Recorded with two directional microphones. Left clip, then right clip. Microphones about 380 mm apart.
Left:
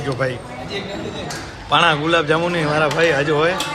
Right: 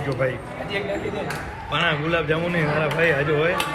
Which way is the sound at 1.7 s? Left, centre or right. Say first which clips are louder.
Left 7 dB; centre.